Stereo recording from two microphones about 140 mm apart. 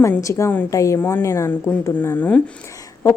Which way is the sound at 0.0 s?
20° left (ahead or behind).